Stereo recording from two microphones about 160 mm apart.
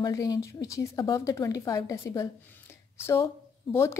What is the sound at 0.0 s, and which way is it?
A woman's voice, 25° left (ahead or behind).